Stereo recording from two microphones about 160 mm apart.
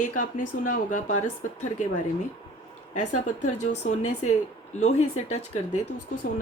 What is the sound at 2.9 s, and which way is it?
Speech, 50° left (ahead or behind).